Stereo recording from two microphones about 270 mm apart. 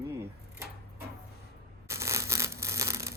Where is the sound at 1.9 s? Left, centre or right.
Centre.